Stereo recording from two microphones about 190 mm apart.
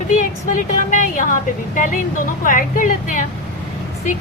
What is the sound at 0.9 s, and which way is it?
A woman's voice, 45° left (ahead or behind).